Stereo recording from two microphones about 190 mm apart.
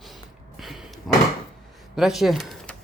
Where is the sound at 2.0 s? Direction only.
Centre (ahead or behind).